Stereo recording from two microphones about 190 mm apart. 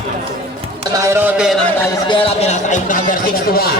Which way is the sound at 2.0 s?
30° left (ahead or behind).